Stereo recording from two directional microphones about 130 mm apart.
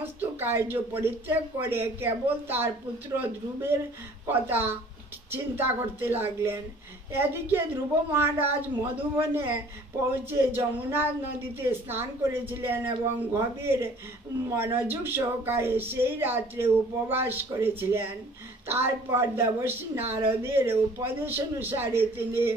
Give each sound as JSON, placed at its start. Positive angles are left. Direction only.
{"t": 0.0, "sound": "a woman's voice", "side_deg": -15}